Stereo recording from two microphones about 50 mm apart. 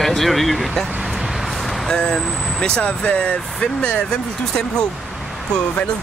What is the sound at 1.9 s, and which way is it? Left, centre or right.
Speech, centre.